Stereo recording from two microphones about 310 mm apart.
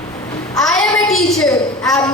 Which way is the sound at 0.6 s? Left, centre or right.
Centre.